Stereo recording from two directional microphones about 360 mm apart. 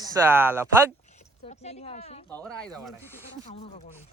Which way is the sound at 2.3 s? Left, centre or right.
Centre.